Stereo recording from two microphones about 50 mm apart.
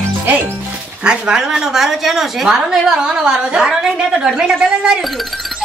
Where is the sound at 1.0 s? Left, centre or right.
Centre.